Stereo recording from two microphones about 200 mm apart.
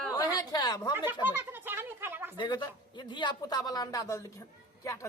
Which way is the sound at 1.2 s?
10° right (ahead or behind).